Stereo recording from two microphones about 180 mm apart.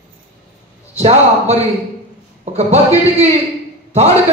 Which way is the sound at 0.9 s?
35° right (ahead or behind).